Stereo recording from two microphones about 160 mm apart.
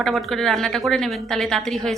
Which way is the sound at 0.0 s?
Centre (ahead or behind).